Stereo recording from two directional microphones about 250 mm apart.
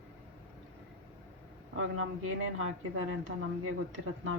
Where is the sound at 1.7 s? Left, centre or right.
Right.